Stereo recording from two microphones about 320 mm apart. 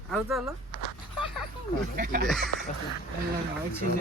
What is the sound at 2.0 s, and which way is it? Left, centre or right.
Speech, right.